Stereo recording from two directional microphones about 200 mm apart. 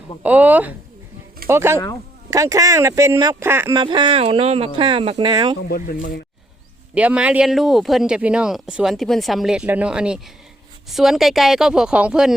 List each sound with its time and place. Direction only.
0.2 s speech: 10° right (ahead or behind)
3.8 s speech: 25° right (ahead or behind)
5.6 s speech: 45° left (ahead or behind)
6.9 s speech: 5° right (ahead or behind)